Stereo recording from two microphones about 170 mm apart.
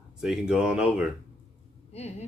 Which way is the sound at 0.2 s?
5° right (ahead or behind).